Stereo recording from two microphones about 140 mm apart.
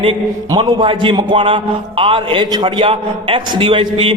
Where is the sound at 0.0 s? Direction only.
35° right (ahead or behind).